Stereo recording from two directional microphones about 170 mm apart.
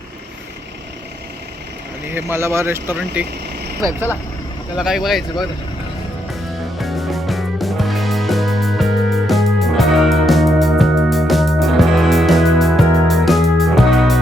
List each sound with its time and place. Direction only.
2.0 s speech: 15° right (ahead or behind)
4.8 s speech: centre (ahead or behind)
6.7 s music: centre (ahead or behind)